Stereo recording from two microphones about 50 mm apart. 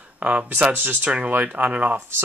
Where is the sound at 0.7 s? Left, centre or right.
Right.